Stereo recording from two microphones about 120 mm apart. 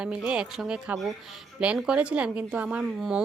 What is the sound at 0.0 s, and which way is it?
Speech, 10° right (ahead or behind).